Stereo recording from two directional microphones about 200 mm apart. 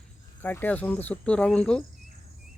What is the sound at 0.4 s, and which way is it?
Speech, 10° left (ahead or behind).